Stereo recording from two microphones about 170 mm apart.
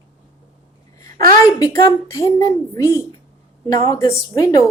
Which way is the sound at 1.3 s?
20° left (ahead or behind).